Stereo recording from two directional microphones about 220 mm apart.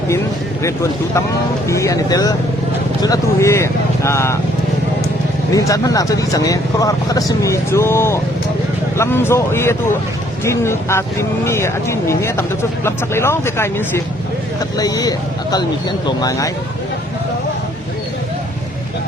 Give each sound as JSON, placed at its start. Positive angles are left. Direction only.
{"t": 0.6, "sound": "speech", "side_deg": 15}
{"t": 5.5, "sound": "speech", "side_deg": 15}